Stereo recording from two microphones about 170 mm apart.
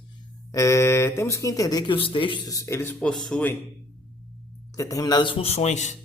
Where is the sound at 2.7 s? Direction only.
15° left (ahead or behind).